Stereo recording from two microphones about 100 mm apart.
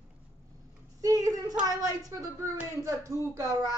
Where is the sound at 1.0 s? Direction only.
40° right (ahead or behind).